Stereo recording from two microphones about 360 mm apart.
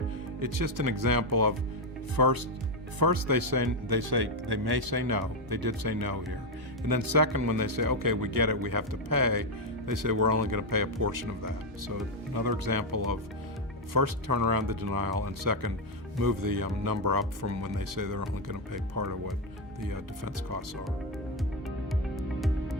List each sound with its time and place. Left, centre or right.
0.3 s speech: right
12.3 s speech: right
17.4 s speech: right
22.1 s music: centre